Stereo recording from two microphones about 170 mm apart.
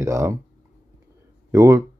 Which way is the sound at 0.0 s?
20° right (ahead or behind).